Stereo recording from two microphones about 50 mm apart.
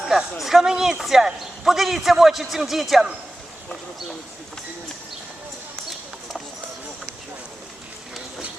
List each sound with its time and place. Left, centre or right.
0.0 s speech: centre